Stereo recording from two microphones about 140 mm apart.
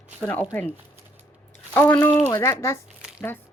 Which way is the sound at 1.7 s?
15° left (ahead or behind).